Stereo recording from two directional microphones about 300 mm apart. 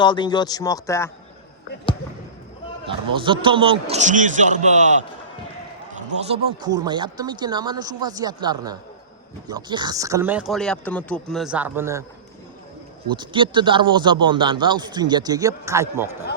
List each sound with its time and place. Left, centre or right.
0.0 s speech: centre
2.8 s a man's voice: centre
6.4 s speech: centre
13.1 s speech: centre